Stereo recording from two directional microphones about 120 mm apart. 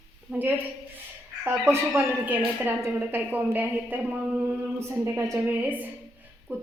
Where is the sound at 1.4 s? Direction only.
20° right (ahead or behind).